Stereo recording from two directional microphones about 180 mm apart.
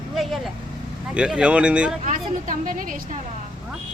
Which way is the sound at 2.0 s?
45° right (ahead or behind).